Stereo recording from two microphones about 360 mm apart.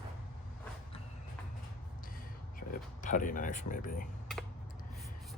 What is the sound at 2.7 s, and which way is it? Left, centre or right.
Speech, left.